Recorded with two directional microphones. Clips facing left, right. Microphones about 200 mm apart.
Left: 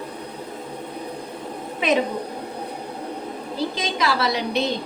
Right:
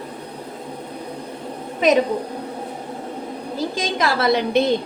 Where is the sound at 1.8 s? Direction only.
40° right (ahead or behind).